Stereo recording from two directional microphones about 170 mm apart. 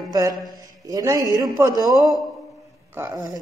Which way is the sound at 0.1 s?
20° right (ahead or behind).